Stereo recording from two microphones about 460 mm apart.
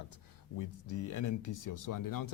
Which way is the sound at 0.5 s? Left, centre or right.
Left.